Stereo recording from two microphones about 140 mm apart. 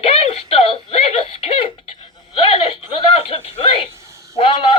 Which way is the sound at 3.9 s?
20° right (ahead or behind).